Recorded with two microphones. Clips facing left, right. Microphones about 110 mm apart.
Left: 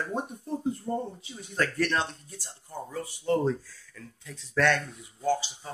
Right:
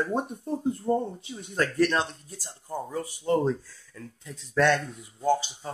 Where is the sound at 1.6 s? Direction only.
15° right (ahead or behind).